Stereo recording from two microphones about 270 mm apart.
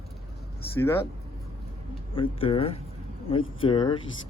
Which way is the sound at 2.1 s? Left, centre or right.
Centre.